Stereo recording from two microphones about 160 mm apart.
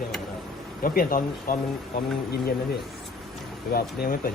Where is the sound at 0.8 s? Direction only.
60° left (ahead or behind).